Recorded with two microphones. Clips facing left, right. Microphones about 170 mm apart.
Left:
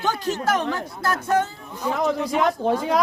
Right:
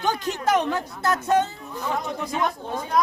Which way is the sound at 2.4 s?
90° left.